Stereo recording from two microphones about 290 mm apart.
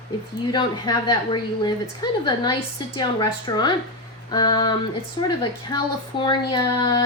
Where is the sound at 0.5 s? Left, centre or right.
Centre.